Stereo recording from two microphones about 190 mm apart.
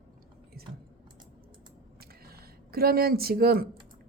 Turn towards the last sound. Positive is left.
turn(degrees=-55)  # may be behind; listen again after turning